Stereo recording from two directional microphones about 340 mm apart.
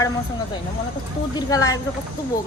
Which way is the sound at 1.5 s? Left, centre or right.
Centre.